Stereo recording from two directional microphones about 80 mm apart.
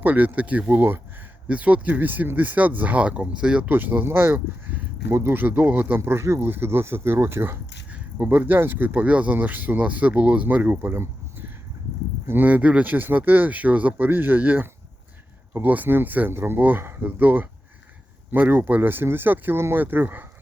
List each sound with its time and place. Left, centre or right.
0.0 s speech: centre
3.7 s speech: right
7.9 s speech: centre